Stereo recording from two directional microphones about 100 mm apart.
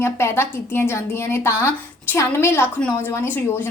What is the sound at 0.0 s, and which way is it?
A woman's voice, 25° left (ahead or behind).